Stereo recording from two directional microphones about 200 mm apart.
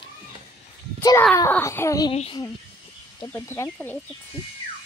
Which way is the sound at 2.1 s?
30° left (ahead or behind).